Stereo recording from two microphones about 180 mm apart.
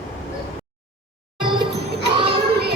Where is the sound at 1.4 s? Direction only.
25° right (ahead or behind).